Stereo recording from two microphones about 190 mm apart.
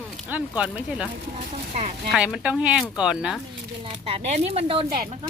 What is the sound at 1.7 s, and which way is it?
Speech, 35° right (ahead or behind).